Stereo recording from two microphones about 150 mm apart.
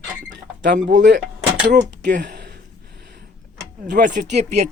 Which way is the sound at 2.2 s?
85° right.